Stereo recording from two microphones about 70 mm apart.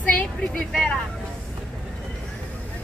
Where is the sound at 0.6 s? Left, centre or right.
Centre.